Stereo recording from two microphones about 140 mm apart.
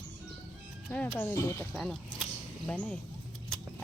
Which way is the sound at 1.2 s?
20° left (ahead or behind).